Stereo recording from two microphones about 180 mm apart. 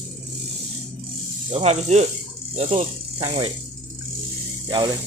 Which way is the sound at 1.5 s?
35° right (ahead or behind).